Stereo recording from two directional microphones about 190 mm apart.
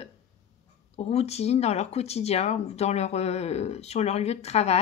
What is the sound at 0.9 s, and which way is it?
Speech, 35° left (ahead or behind).